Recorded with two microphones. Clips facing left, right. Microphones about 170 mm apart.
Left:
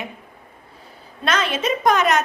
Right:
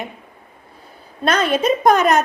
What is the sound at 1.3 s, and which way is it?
Speech, 50° right (ahead or behind).